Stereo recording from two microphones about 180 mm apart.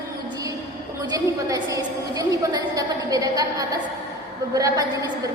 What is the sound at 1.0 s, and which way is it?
A woman's voice, 20° right (ahead or behind).